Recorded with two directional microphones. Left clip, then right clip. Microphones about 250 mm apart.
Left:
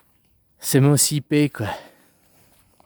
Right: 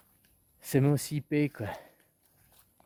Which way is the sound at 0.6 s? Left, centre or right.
Left.